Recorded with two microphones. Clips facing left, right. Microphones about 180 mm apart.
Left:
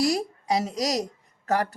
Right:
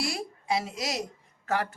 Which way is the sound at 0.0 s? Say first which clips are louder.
Left 9 dB; 40° left (ahead or behind).